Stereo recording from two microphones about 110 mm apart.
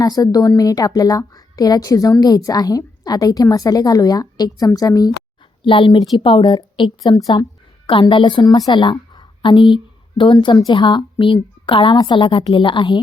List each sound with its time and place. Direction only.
0.0 s a woman's voice: 35° left (ahead or behind)
5.6 s a woman's voice: 50° left (ahead or behind)